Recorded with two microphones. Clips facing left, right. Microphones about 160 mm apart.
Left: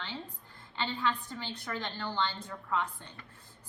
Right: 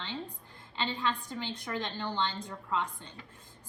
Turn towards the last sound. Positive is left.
turn(degrees=-15)  # may be behind; listen again after turning